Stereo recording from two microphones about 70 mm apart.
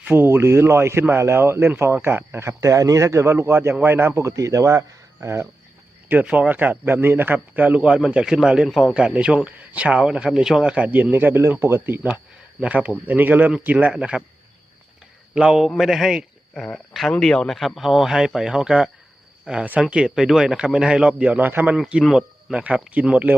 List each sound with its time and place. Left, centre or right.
0.0 s speech: right
2.6 s speech: right
4.3 s speech: right
6.1 s a man's voice: right
10.8 s a man's voice: right
12.6 s a man's voice: centre
13.8 s speech: centre
15.4 s speech: centre
16.6 s speech: centre
17.6 s a man's voice: centre; by 21.8 s right
22.0 s speech: centre
22.5 s a man's voice: centre